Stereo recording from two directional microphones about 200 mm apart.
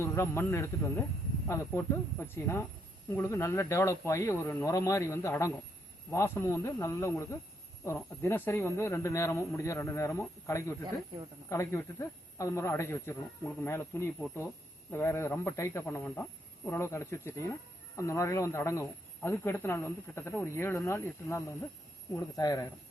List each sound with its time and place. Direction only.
0.0 s speech: 10° left (ahead or behind)